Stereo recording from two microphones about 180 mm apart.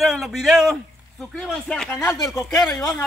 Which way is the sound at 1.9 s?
15° left (ahead or behind).